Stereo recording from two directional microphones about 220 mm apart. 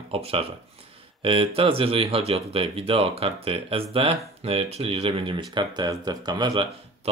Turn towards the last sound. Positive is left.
turn(degrees=-20)  # may be behind; listen again after turning